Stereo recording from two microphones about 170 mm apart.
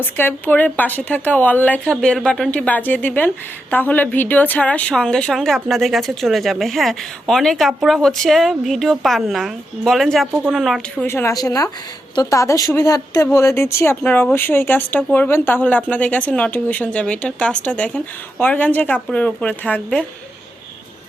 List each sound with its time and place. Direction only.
0.0 s speech: 10° left (ahead or behind)
11.0 s speech: 15° left (ahead or behind)